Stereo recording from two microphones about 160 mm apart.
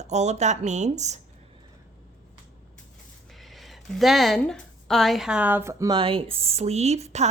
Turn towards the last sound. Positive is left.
turn(degrees=-45)  # may be behind; listen again after turning